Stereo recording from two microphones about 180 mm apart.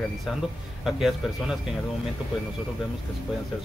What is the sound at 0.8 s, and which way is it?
Speech, centre (ahead or behind).